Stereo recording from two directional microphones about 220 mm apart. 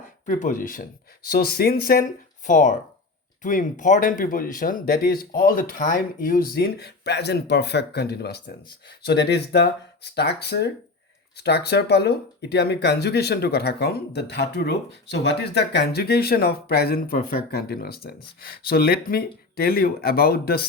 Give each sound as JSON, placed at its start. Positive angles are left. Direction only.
{"t": 0.3, "sound": "speech", "side_deg": 35}